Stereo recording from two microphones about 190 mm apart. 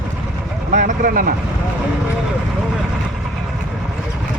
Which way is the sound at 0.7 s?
40° right (ahead or behind).